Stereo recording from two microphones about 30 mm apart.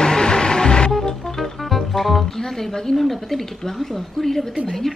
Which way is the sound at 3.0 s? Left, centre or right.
Centre.